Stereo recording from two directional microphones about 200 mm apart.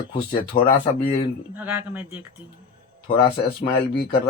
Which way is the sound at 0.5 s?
25° left (ahead or behind).